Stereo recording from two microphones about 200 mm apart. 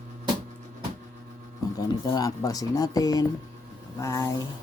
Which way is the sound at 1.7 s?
20° left (ahead or behind).